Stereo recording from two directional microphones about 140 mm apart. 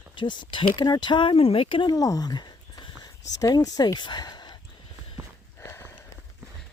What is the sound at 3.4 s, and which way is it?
Speech, 25° left (ahead or behind).